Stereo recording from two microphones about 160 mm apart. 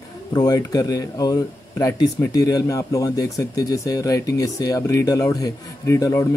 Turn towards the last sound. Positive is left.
turn(degrees=20)  # may be behind; listen again after turning